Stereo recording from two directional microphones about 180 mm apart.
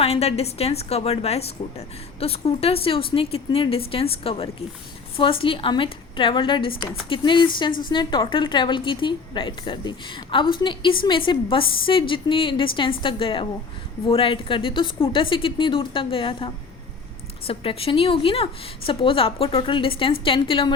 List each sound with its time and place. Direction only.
0.0 s a woman's voice: 35° left (ahead or behind)